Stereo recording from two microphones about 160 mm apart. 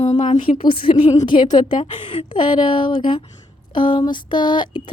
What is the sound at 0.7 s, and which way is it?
A woman's voice, 35° left (ahead or behind).